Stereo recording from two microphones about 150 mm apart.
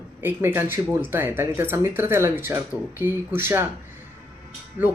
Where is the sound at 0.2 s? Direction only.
15° right (ahead or behind).